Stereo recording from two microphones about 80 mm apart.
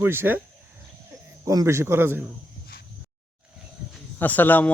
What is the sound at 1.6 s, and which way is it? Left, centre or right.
Speech, right.